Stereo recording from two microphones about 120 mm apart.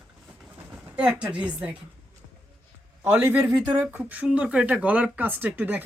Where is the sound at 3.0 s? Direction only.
15° right (ahead or behind).